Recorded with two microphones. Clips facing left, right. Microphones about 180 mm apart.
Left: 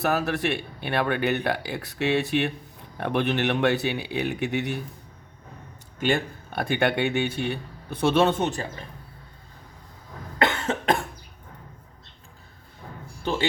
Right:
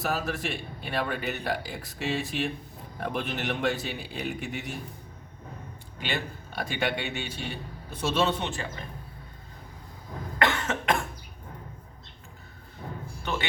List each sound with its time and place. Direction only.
0.0 s a man's voice: 65° left (ahead or behind)
6.0 s speech: 50° left (ahead or behind)
10.3 s cough: 30° left (ahead or behind)